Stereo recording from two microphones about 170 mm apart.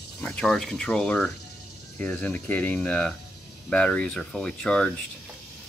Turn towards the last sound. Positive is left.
turn(degrees=5)  # may be behind; listen again after turning